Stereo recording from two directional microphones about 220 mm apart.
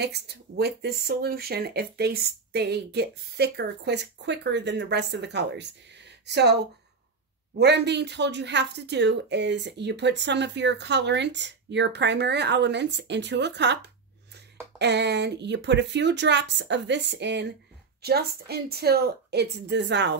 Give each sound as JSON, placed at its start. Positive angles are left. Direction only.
{"t": 0.0, "sound": "speech", "side_deg": -50}